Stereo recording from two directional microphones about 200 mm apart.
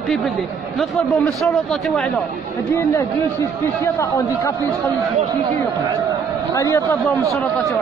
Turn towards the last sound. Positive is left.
turn(degrees=15)  # may be behind; listen again after turning